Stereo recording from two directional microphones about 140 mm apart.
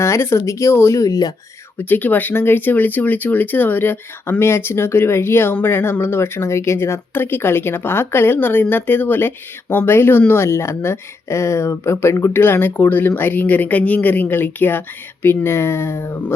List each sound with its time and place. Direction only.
0.0 s speech: 20° left (ahead or behind)
1.8 s speech: 15° left (ahead or behind)